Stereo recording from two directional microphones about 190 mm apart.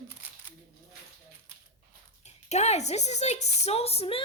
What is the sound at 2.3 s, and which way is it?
A woman's voice, 35° left (ahead or behind).